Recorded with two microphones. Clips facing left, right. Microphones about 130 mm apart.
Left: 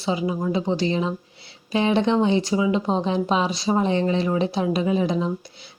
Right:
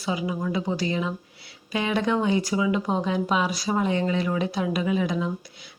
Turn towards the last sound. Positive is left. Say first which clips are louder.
# left 3 dB
turn(degrees=30)  # may be behind; listen again after turning